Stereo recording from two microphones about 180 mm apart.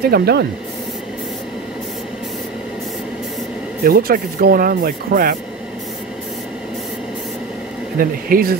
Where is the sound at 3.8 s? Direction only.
55° right (ahead or behind).